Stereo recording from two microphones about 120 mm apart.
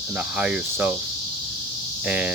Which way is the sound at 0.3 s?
10° right (ahead or behind).